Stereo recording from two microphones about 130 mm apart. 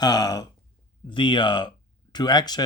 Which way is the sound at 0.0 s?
30° left (ahead or behind).